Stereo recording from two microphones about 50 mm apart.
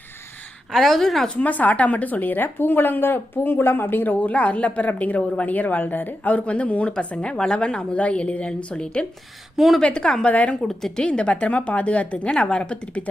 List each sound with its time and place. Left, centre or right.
0.7 s a woman's voice: centre
1.4 s a woman's voice: left; by 9.0 s centre
9.6 s a woman's voice: centre
9.8 s a woman's voice: centre
10.6 s a woman's voice: centre
11.0 s a woman's voice: left